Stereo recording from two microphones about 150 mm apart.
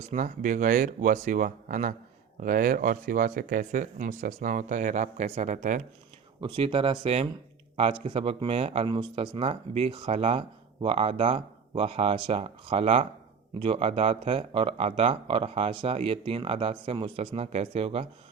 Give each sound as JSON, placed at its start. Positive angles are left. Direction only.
{"t": 0.1, "sound": "speech", "side_deg": -60}
{"t": 6.4, "sound": "speech", "side_deg": -35}